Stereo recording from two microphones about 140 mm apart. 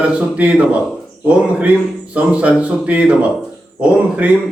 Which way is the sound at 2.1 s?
10° right (ahead or behind).